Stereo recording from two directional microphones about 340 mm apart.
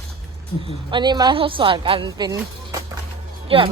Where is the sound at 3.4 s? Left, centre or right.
Centre.